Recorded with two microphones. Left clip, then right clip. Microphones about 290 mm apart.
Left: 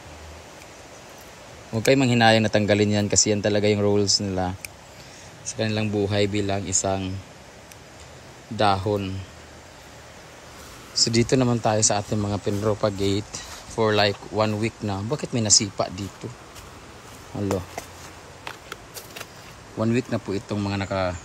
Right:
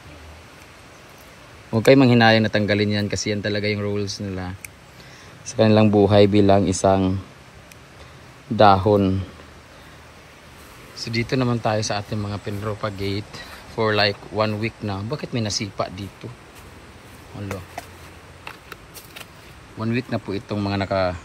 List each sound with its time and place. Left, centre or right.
1.7 s speech: centre
5.6 s a man's voice: centre
8.5 s a man's voice: centre
11.0 s speech: centre
17.3 s speech: centre
19.8 s speech: centre